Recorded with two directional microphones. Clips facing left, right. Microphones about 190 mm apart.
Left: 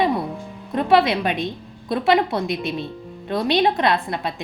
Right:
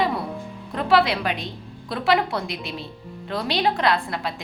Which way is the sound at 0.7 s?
20° left (ahead or behind).